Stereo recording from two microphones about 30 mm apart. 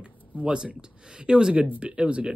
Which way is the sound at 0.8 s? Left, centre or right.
Right.